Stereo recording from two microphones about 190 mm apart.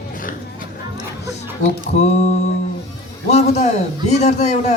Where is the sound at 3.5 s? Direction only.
35° left (ahead or behind).